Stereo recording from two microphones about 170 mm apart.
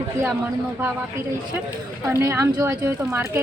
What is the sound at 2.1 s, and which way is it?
A woman's voice, 15° right (ahead or behind).